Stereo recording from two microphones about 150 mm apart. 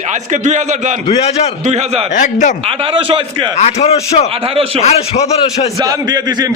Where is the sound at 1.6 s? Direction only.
50° right (ahead or behind).